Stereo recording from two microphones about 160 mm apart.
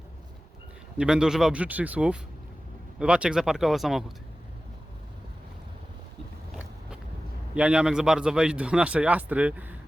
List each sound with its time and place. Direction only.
0.9 s speech: 5° right (ahead or behind)
7.5 s speech: 5° right (ahead or behind)